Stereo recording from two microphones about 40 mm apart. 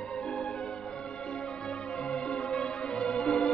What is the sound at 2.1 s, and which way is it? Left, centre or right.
Music, left.